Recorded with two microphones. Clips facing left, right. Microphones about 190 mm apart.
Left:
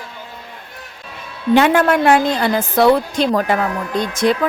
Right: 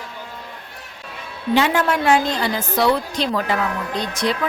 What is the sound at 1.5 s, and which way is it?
A woman's voice, 55° left (ahead or behind).